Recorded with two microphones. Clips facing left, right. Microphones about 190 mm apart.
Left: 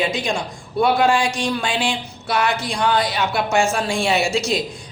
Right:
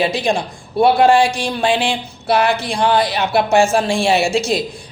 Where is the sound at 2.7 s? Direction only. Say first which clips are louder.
Right 3 dB; 30° right (ahead or behind).